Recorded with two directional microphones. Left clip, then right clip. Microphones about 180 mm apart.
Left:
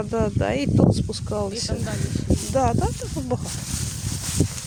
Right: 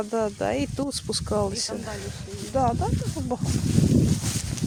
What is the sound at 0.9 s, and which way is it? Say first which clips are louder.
Speech: left 2 dB; 10° right (ahead or behind).